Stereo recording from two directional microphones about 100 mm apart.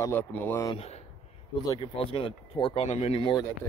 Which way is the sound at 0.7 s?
80° left.